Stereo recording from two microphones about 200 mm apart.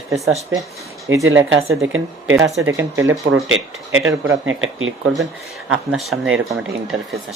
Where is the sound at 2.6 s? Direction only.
15° right (ahead or behind).